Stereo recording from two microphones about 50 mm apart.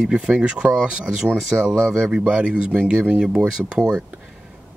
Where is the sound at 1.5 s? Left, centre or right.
Right.